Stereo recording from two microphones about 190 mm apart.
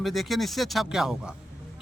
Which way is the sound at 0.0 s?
Centre (ahead or behind).